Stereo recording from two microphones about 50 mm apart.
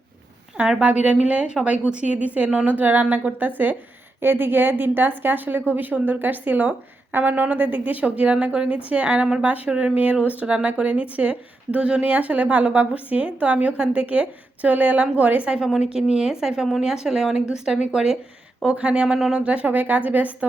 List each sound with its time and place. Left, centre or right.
0.8 s a woman's voice: right
4.2 s a woman's voice: right
15.4 s a woman's voice: centre
19.0 s a woman's voice: centre; by 20.5 s right